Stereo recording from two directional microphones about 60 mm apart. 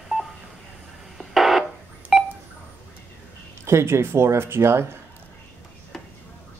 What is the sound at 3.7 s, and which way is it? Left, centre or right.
Speech, right.